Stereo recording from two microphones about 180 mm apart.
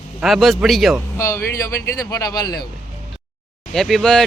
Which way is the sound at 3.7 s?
Centre (ahead or behind).